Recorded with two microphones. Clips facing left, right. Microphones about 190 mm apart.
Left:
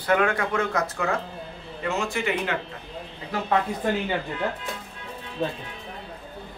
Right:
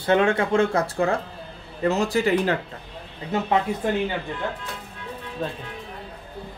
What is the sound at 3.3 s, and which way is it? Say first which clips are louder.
Speech: right 4 dB; 25° right (ahead or behind).